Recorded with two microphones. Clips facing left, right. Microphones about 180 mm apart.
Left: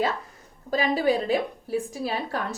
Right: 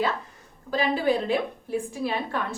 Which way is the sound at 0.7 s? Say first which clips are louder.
Left 1 dB; 40° left (ahead or behind).